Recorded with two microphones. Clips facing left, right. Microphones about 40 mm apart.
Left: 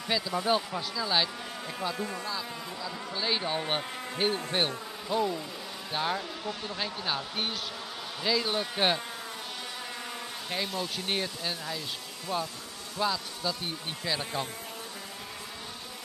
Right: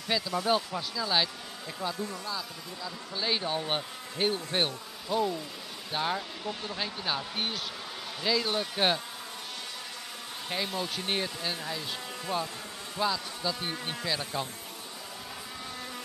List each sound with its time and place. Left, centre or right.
0.1 s speech: centre
2.0 s speech: left
2.3 s speech: centre
10.5 s speech: centre
12.3 s bee: centre
13.0 s speech: centre